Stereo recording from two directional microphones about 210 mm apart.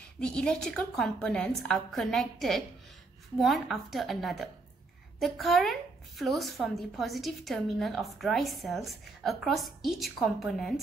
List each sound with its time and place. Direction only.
0.2 s a woman's voice: 5° left (ahead or behind)